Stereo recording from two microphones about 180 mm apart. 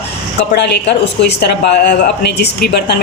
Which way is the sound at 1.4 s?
70° left (ahead or behind).